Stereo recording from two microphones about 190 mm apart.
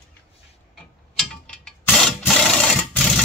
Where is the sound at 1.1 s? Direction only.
5° left (ahead or behind).